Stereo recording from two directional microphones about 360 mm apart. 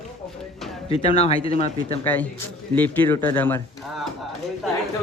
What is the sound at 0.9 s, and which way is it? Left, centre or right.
Speech, centre.